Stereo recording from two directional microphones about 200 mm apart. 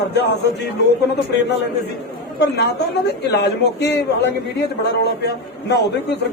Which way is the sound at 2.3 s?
55° left (ahead or behind).